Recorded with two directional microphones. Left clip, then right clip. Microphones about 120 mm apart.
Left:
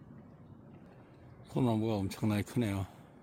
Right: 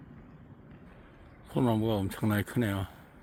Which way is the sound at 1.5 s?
10° left (ahead or behind).